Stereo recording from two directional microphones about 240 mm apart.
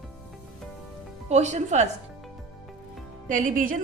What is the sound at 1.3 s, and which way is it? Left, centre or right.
Speech, right.